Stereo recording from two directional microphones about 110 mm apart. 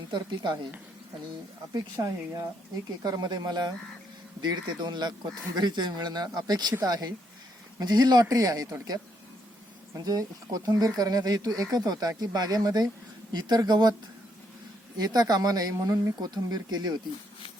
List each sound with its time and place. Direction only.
0.1 s a woman's voice: 45° right (ahead or behind)
1.7 s speech: 30° right (ahead or behind)
9.9 s speech: 35° right (ahead or behind)
14.9 s speech: 40° right (ahead or behind)